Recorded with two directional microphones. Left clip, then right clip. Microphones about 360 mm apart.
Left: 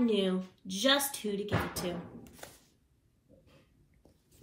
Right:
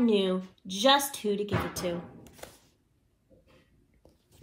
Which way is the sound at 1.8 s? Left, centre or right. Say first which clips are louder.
Right 5 dB; centre.